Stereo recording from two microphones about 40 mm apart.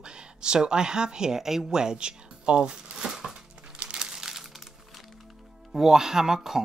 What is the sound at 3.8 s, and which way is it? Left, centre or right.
Crumpling, centre.